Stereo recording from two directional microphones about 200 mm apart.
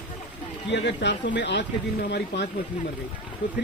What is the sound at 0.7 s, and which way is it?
Speech, 60° left (ahead or behind).